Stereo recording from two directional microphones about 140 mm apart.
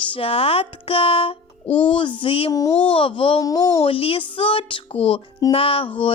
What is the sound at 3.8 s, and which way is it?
Speech, 40° left (ahead or behind).